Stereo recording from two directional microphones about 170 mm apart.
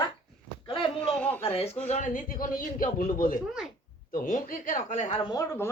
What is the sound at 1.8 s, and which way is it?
A man's voice, 45° left (ahead or behind).